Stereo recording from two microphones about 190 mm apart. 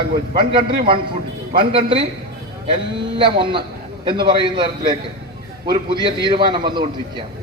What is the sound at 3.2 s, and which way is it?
A man's voice, 25° right (ahead or behind).